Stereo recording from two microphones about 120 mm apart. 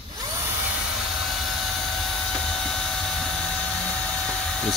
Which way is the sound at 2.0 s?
5° left (ahead or behind).